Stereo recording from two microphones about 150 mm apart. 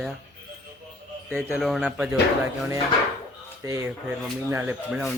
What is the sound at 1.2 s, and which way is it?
Speech, centre (ahead or behind).